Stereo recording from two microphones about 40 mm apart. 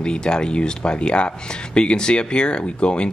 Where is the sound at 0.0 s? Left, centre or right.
Left.